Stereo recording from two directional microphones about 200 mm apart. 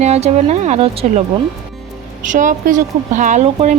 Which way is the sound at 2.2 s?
40° right (ahead or behind).